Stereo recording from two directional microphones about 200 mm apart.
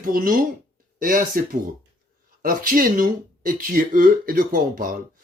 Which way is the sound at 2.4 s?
45° right (ahead or behind).